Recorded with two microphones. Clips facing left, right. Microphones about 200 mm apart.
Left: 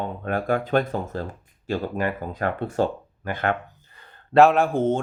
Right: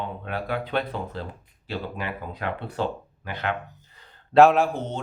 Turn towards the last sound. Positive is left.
turn(degrees=50)  # may be behind; listen again after turning